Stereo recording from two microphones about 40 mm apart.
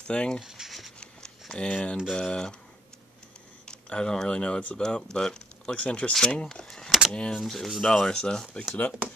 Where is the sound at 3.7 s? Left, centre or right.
Left.